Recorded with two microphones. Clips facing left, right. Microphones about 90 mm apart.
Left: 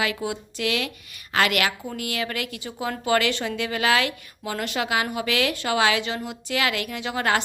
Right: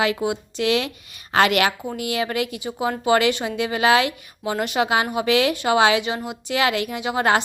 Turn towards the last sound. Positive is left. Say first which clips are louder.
# right 4 dB
turn(degrees=-20)  # may be behind; listen again after turning